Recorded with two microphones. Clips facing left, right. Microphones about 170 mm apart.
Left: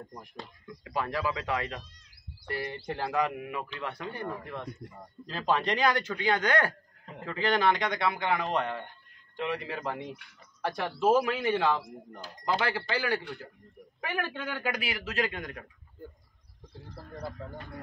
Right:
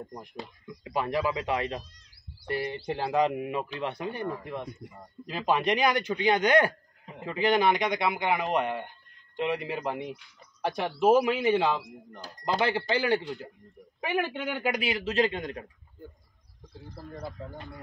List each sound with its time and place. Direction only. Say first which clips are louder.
0.0 s speech: right 4 dB; 20° right (ahead or behind)